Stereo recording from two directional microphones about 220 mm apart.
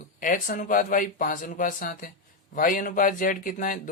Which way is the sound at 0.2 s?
40° left (ahead or behind).